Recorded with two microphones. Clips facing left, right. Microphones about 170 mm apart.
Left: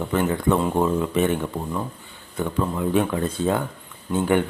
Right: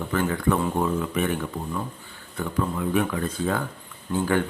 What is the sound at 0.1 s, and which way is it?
Speech, 20° left (ahead or behind).